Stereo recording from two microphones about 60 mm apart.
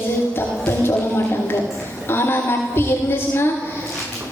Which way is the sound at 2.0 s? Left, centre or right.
Left.